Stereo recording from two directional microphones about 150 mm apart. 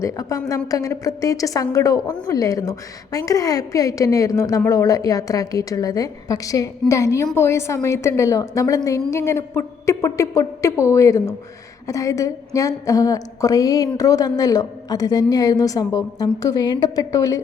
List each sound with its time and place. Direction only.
0.0 s a woman's voice: 20° left (ahead or behind)